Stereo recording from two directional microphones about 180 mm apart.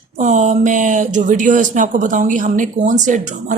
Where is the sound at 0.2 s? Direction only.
40° right (ahead or behind).